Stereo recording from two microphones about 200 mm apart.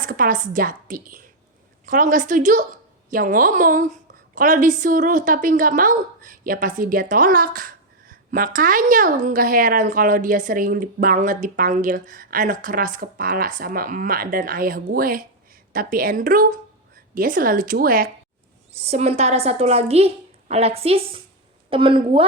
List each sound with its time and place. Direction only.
0.1 s a woman's voice: 45° right (ahead or behind)
18.7 s a woman's voice: 30° right (ahead or behind)